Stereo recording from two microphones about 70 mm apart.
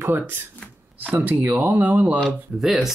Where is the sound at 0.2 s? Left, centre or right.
Right.